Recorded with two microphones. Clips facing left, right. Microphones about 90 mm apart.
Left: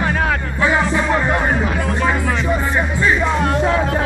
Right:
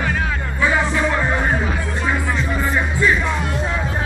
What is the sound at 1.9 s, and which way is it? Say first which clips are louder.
Music: left 3 dB; 55° left (ahead or behind).